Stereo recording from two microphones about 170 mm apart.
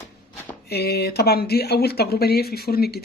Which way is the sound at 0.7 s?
70° left (ahead or behind).